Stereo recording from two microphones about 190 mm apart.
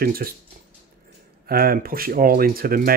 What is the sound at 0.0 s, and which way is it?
Speech, 50° right (ahead or behind).